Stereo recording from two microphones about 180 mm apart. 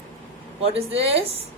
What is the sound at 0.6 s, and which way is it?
Speech, 35° right (ahead or behind).